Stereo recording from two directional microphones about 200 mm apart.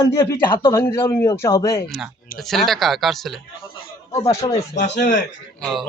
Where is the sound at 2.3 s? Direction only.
Centre (ahead or behind).